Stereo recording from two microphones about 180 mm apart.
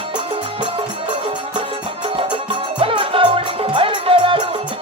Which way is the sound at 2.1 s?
30° right (ahead or behind).